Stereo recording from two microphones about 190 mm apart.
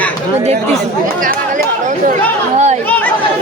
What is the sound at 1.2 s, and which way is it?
Chatter, 45° right (ahead or behind).